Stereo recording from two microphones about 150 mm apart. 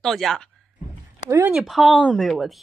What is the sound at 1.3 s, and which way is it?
Speech, 15° right (ahead or behind).